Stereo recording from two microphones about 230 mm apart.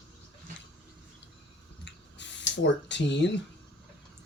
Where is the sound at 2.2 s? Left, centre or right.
Left.